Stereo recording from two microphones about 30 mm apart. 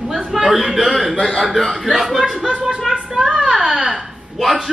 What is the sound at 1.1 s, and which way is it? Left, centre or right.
Speech, centre.